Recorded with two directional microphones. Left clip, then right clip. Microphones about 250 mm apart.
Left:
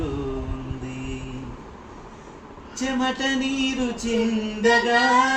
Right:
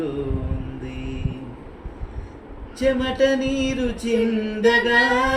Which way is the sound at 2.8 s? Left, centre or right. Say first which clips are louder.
Right 5 dB; centre.